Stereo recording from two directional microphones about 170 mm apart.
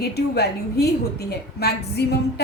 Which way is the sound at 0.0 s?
70° left (ahead or behind).